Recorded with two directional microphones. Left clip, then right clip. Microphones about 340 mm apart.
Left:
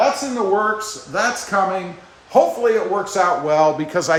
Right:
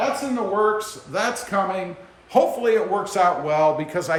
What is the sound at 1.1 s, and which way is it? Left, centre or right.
Speech, centre.